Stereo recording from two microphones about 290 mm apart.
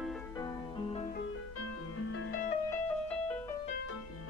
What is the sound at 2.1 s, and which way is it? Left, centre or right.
Music, left.